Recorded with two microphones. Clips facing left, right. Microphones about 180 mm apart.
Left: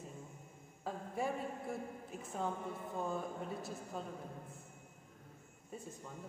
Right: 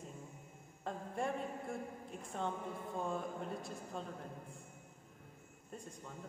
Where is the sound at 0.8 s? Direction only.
5° left (ahead or behind).